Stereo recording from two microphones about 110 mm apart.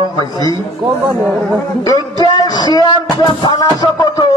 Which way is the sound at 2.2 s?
40° left (ahead or behind).